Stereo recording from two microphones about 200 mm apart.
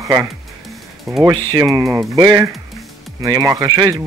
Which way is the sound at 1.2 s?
20° right (ahead or behind).